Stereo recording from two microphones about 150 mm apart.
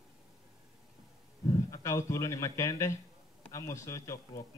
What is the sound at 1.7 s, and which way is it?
Speech, 20° left (ahead or behind).